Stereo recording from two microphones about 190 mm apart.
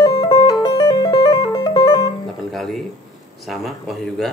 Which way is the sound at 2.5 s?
Centre (ahead or behind).